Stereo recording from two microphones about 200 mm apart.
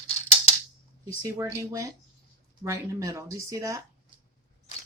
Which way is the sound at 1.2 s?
15° right (ahead or behind).